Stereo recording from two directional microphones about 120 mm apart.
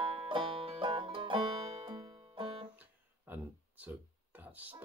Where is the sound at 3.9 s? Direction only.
15° right (ahead or behind).